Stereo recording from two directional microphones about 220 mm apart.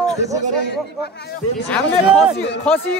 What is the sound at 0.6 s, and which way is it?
Speech, 50° left (ahead or behind).